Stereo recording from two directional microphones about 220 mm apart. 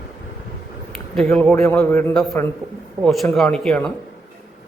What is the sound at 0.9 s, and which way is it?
A man's voice, centre (ahead or behind).